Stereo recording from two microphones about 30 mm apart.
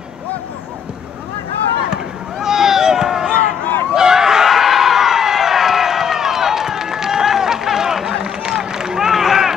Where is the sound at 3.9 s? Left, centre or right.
Centre.